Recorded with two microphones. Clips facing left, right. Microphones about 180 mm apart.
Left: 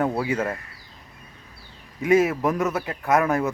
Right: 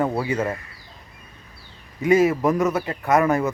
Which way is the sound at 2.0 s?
Centre (ahead or behind).